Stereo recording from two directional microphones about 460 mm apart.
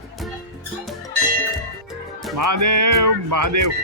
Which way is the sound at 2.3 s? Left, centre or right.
Right.